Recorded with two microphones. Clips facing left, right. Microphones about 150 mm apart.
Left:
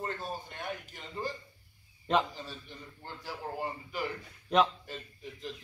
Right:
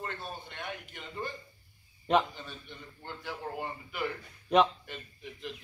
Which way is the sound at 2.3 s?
35° left (ahead or behind).